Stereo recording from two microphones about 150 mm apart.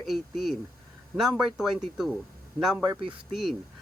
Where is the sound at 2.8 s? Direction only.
35° right (ahead or behind).